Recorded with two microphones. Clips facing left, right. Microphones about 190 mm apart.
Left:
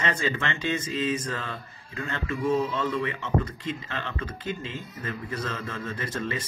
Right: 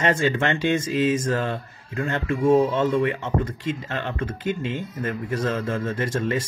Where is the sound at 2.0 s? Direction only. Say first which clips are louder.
Right 6 dB; 50° right (ahead or behind).